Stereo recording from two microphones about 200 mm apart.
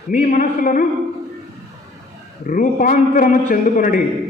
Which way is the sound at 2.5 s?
40° left (ahead or behind).